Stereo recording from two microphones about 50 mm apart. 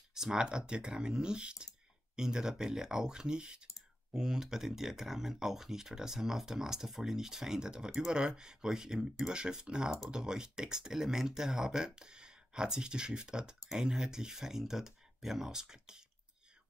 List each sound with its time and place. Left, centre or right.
0.1 s speech: centre